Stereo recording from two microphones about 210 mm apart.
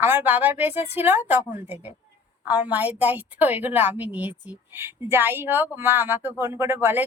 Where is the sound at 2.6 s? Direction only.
5° right (ahead or behind).